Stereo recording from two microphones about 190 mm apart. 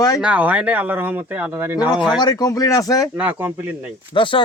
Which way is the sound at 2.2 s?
20° left (ahead or behind).